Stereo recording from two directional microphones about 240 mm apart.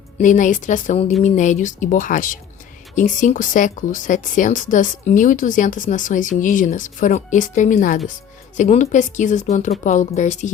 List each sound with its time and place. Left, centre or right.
0.2 s a woman's voice: left